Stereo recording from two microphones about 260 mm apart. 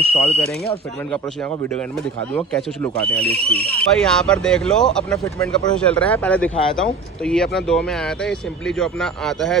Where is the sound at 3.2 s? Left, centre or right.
Right.